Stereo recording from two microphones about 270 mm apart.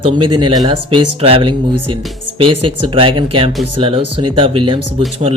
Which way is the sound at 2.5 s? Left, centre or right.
Right.